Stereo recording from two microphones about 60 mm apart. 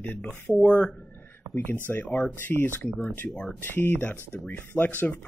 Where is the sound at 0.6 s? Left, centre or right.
Left.